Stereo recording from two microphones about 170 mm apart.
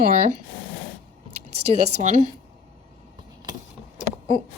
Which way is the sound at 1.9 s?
45° right (ahead or behind).